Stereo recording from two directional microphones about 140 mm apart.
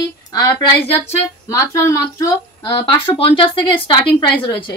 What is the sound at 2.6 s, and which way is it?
A woman's voice, 35° left (ahead or behind).